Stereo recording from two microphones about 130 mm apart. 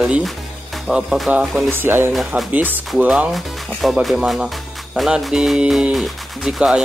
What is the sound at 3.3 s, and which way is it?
Speech, centre (ahead or behind).